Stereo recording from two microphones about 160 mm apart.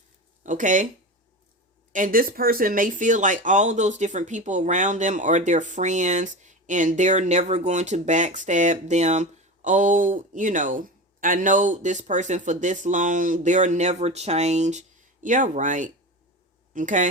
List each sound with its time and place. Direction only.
0.4 s speech: 55° right (ahead or behind)
1.9 s speech: 60° right (ahead or behind)